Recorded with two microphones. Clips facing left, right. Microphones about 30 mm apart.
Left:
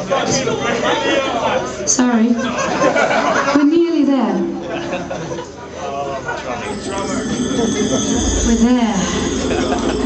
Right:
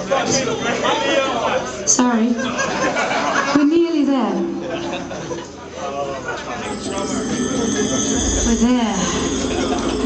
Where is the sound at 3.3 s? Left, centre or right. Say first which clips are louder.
Right 1 dB; centre.